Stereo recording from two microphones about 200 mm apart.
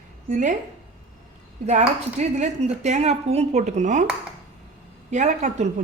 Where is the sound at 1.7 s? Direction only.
35° right (ahead or behind).